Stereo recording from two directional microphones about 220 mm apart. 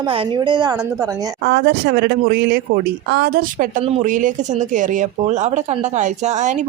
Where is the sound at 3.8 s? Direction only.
30° right (ahead or behind).